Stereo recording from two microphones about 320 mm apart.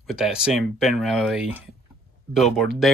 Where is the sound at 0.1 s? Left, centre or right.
Centre.